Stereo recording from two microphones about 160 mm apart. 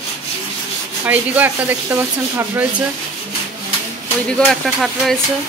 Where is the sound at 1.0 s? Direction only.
10° right (ahead or behind).